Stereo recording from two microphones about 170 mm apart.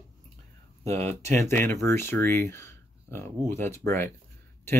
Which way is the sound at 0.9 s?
40° right (ahead or behind).